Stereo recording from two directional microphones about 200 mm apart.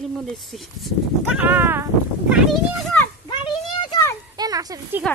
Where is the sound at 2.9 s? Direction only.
5° left (ahead or behind).